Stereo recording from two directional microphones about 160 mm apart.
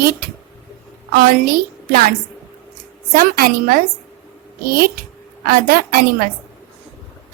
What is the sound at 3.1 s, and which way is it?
A woman's voice, 65° right (ahead or behind).